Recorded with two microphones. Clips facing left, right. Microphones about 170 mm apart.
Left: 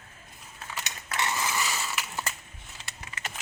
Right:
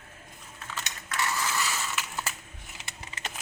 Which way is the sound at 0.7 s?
10° left (ahead or behind).